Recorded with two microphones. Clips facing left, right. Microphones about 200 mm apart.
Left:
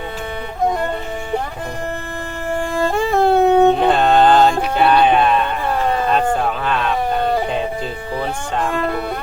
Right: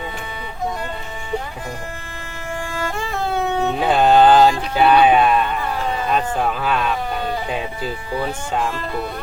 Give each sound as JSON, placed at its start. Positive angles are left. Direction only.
{"t": 3.1, "sound": "music", "side_deg": 55}
{"t": 3.8, "sound": "music", "side_deg": -5}
{"t": 4.8, "sound": "speech", "side_deg": -5}